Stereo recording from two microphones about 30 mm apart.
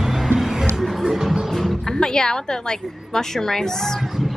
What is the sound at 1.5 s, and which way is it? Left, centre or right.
Music, centre.